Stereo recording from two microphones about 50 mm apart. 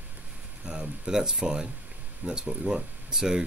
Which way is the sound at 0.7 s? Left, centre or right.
Centre.